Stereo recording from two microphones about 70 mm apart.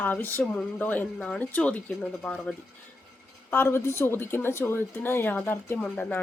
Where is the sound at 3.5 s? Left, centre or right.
Left.